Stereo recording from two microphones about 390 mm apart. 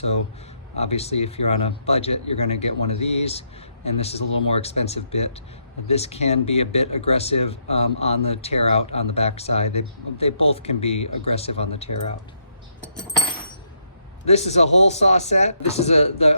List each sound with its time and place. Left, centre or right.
0.8 s speech: centre
14.3 s speech: centre